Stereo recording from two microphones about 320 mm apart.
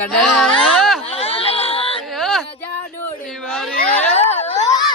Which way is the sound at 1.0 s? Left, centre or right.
Centre.